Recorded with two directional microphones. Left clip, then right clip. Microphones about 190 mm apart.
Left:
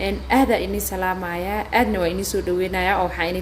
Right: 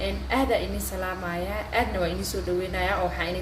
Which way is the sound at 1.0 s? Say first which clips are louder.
Left 6 dB; 50° left (ahead or behind).